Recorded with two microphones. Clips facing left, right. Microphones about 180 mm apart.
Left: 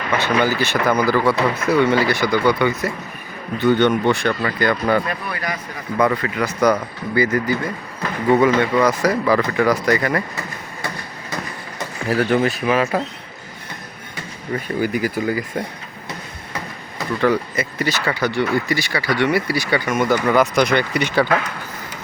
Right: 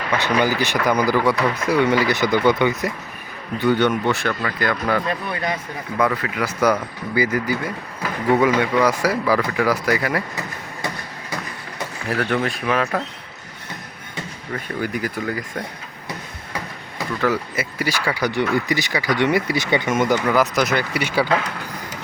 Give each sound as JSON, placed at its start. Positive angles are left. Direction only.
{"t": 0.2, "sound": "a man's voice", "side_deg": -15}
{"t": 5.0, "sound": "speech", "side_deg": -25}
{"t": 6.0, "sound": "a man's voice", "side_deg": 0}
{"t": 12.0, "sound": "a man's voice", "side_deg": 5}
{"t": 14.8, "sound": "a man's voice", "side_deg": 5}
{"t": 17.0, "sound": "speech", "side_deg": -5}
{"t": 20.2, "sound": "a man's voice", "side_deg": 0}